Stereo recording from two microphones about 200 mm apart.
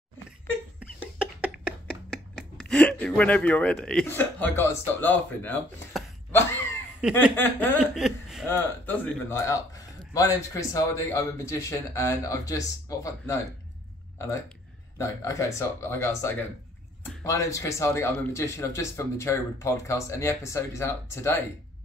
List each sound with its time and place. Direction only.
0.7 s a sound: 5° right (ahead or behind)
2.3 s speech: 5° left (ahead or behind)
7.0 s snicker: 5° right (ahead or behind)
7.3 s speech: 10° left (ahead or behind)
7.8 s speech: centre (ahead or behind)
8.5 s speech: 10° left (ahead or behind)